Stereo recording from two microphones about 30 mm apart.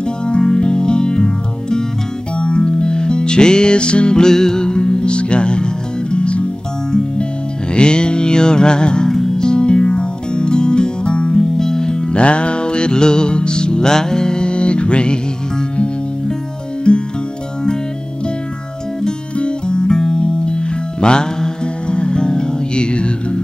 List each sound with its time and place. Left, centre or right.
0.0 s music: left
4.2 s music: centre; by 6.4 s left
6.9 s music: left
9.1 s music: centre
9.4 s music: left
11.5 s music: centre
12.1 s music: left
16.9 s music: left
19.3 s music: left